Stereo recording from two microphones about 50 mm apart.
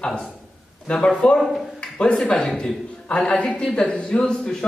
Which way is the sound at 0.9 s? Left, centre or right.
Left.